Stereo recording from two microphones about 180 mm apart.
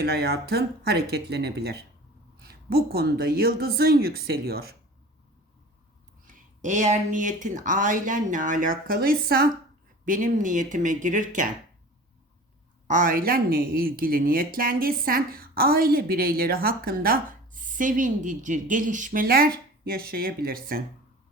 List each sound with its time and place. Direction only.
0.0 s speech: 65° right (ahead or behind)
6.2 s speech: 45° right (ahead or behind)
10.1 s speech: 45° right (ahead or behind)
12.9 s speech: 50° right (ahead or behind)